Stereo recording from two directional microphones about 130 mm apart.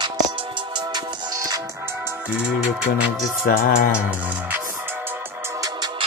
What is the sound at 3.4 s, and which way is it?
Speech, 90° left.